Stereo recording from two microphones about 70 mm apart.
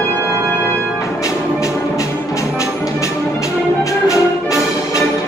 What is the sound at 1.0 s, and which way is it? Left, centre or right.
Music, left.